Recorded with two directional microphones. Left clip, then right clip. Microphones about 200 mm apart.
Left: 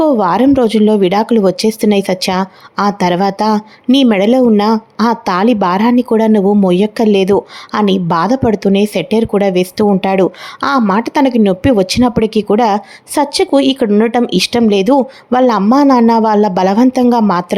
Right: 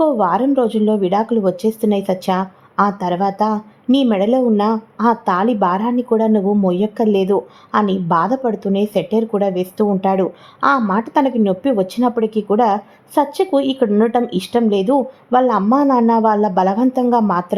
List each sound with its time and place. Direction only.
0.0 s speech: 35° left (ahead or behind)